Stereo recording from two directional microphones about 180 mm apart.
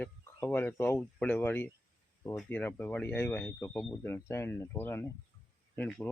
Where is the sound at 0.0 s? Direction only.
10° left (ahead or behind).